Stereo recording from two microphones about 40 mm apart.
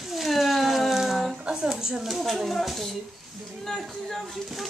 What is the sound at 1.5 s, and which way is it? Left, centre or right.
Speech, centre.